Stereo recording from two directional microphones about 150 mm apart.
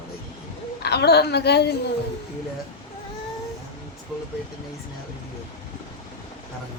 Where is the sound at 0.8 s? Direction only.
90° left.